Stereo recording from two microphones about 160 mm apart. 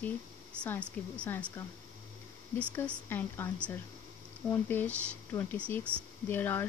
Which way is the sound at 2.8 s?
10° left (ahead or behind).